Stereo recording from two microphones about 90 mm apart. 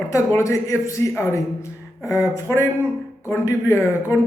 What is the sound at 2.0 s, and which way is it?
A man's voice, 30° left (ahead or behind).